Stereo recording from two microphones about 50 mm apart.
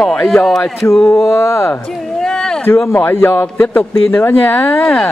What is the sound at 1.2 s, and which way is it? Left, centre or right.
Speech, left.